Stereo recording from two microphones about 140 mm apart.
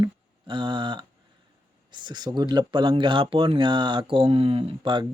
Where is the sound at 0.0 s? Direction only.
35° right (ahead or behind).